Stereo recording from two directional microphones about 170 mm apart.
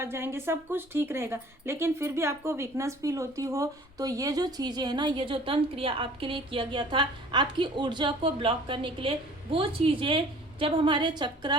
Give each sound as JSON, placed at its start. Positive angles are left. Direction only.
{"t": 0.0, "sound": "a woman's voice", "side_deg": -15}